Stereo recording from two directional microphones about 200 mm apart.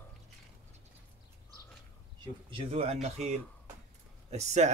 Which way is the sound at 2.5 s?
30° right (ahead or behind).